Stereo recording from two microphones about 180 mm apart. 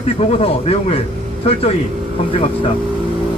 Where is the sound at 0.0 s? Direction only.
35° left (ahead or behind).